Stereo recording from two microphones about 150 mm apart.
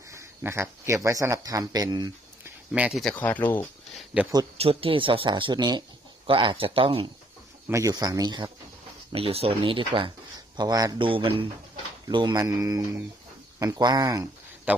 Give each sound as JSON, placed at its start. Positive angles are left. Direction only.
{"t": 0.1, "sound": "a sound", "side_deg": -20}
{"t": 1.0, "sound": "speech", "side_deg": -20}
{"t": 2.7, "sound": "speech", "side_deg": -10}
{"t": 3.0, "sound": "speech", "side_deg": 10}
{"t": 3.9, "sound": "a sound", "side_deg": -5}
{"t": 4.6, "sound": "speech", "side_deg": -40}
{"t": 7.7, "sound": "speech", "side_deg": -20}
{"t": 9.1, "sound": "speech", "side_deg": -40}
{"t": 14.7, "sound": "a man's voice", "side_deg": -10}